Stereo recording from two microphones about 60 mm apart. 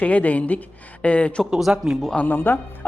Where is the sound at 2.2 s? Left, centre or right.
Left.